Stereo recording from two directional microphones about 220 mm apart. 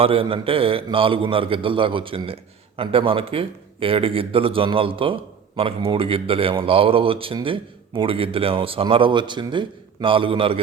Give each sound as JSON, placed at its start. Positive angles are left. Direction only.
{"t": 0.0, "sound": "a man's voice", "side_deg": -25}